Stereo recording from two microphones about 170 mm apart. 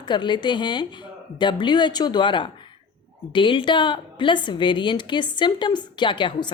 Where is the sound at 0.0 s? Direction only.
25° left (ahead or behind).